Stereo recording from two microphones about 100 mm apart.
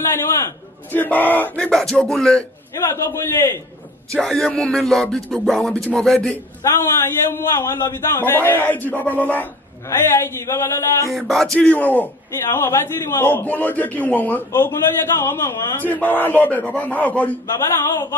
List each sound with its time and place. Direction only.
0.9 s a man's voice: 20° left (ahead or behind)
1.7 s a man's voice: 5° left (ahead or behind)
2.9 s a man's voice: 25° left (ahead or behind)
4.1 s a sound: 5° left (ahead or behind)
5.9 s a man's voice: 5° left (ahead or behind)
6.6 s a man's voice: 25° left (ahead or behind)
11.1 s a sound: centre (ahead or behind)
11.5 s a man's voice: 15° left (ahead or behind)